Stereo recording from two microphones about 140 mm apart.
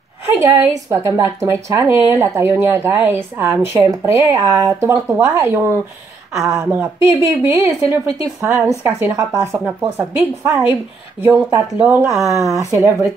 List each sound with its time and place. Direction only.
0.3 s a woman's voice: 20° right (ahead or behind)
6.3 s speech: 5° right (ahead or behind)
6.7 s a woman's voice: 15° right (ahead or behind)